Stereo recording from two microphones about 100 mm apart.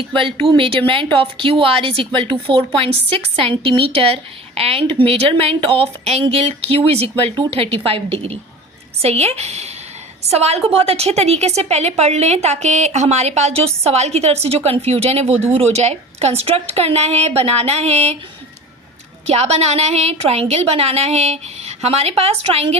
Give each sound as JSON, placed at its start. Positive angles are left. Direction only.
{"t": 0.2, "sound": "a woman's voice", "side_deg": -65}
{"t": 3.6, "sound": "speech", "side_deg": -60}
{"t": 7.5, "sound": "a woman's voice", "side_deg": -70}
{"t": 19.3, "sound": "a woman's voice", "side_deg": -90}